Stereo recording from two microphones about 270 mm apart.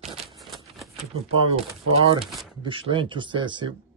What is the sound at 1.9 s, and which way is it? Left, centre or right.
Speech, centre.